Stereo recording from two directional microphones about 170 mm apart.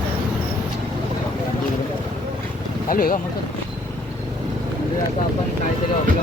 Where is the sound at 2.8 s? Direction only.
55° left (ahead or behind).